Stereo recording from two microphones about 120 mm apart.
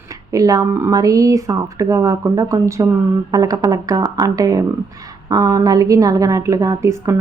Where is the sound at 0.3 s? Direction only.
30° right (ahead or behind).